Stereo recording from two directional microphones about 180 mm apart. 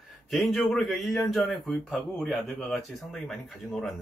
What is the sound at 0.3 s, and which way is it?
Speech, centre (ahead or behind).